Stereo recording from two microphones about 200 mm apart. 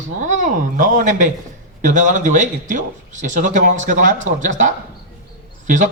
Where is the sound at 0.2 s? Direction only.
40° right (ahead or behind).